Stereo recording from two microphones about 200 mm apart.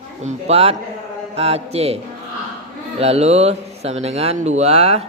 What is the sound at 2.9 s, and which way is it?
Speech, 30° right (ahead or behind).